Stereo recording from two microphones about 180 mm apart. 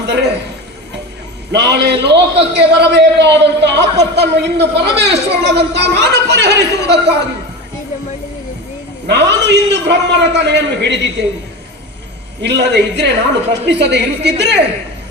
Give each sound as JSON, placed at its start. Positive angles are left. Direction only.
{"t": 0.0, "sound": "a sound", "side_deg": -75}
{"t": 1.5, "sound": "a man's voice", "side_deg": -70}
{"t": 9.0, "sound": "a man's voice", "side_deg": -75}
{"t": 12.4, "sound": "a man's voice", "side_deg": -70}